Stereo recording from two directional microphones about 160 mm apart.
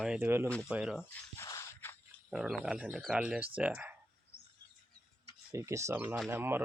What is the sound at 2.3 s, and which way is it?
Speech, 5° right (ahead or behind).